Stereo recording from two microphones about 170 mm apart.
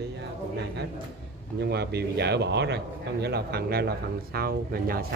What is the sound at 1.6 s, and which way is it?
Speech, 75° right (ahead or behind).